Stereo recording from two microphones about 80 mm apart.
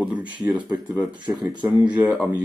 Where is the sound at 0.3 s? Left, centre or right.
Centre.